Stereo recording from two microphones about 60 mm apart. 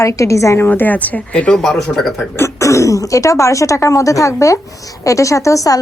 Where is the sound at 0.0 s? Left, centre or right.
Left.